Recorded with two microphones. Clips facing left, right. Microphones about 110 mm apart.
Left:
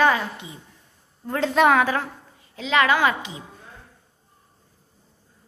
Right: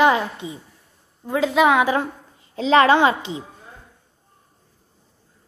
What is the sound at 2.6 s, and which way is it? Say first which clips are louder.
Speech: right 5 dB; 35° right (ahead or behind).